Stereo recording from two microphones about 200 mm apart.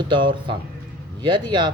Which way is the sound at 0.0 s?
25° right (ahead or behind).